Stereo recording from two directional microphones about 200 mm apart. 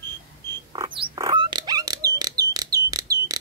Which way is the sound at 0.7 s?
20° right (ahead or behind).